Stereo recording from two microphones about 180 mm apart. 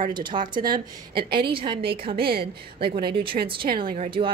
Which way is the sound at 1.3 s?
55° right (ahead or behind).